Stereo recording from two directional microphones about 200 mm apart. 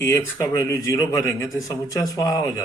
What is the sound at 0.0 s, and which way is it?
A man's voice, 15° left (ahead or behind).